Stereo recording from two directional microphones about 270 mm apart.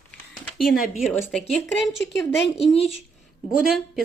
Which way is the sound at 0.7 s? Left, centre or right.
Left.